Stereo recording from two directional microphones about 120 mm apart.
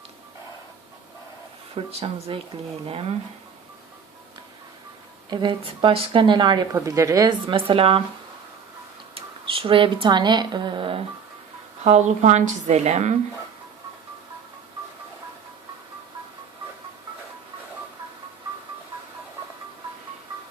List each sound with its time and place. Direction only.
1.7 s speech: 55° right (ahead or behind)
5.3 s speech: 40° right (ahead or behind)
6.7 s a woman's voice: 25° right (ahead or behind)
7.4 s speech: 50° right (ahead or behind)
9.1 s a woman's voice: 50° right (ahead or behind)
11.8 s a woman's voice: 70° right (ahead or behind)